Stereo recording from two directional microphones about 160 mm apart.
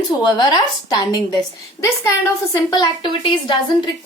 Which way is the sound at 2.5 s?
25° left (ahead or behind).